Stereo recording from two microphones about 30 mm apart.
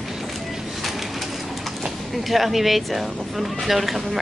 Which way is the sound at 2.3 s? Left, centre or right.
Centre.